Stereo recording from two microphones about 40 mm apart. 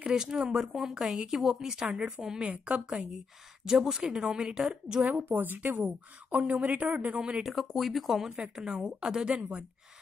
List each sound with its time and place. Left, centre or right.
0.0 s a woman's voice: centre
3.6 s a woman's voice: centre
5.0 s a woman's voice: right
7.5 s speech: centre
8.2 s a woman's voice: centre
9.3 s a woman's voice: right